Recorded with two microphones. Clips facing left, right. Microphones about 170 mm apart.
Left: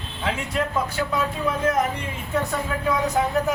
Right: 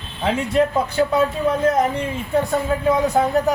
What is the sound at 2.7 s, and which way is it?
Speech, 30° right (ahead or behind).